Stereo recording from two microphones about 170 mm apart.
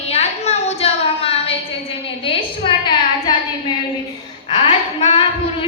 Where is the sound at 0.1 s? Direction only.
40° left (ahead or behind).